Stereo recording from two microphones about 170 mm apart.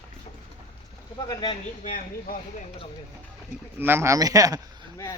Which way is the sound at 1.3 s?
25° left (ahead or behind).